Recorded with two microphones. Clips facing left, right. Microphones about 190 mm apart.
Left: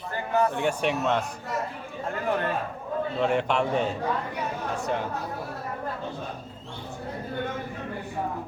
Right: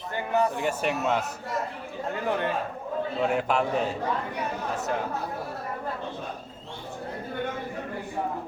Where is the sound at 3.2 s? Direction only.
5° right (ahead or behind).